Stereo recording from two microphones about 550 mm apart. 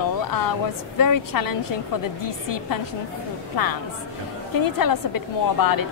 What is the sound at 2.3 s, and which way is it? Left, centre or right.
A woman's voice, left.